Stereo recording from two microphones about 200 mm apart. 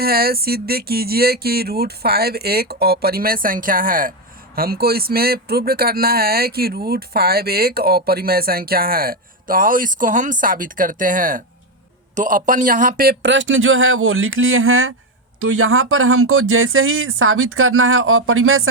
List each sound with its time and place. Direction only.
0.0 s speech: 50° right (ahead or behind); by 18.7 s 90° right